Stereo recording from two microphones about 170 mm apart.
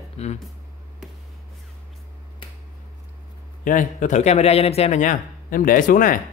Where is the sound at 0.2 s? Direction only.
35° left (ahead or behind).